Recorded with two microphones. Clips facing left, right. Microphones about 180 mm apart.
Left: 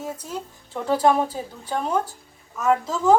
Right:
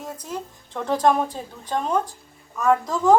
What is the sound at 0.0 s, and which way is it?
Speech, 5° left (ahead or behind).